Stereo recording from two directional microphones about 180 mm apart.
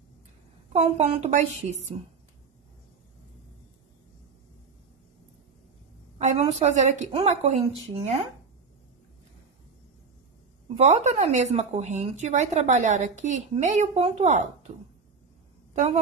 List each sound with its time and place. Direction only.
0.7 s a woman's voice: 35° right (ahead or behind)
6.1 s a woman's voice: 40° right (ahead or behind)
10.8 s a woman's voice: 40° right (ahead or behind)